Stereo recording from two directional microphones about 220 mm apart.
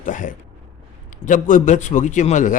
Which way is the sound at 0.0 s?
35° left (ahead or behind).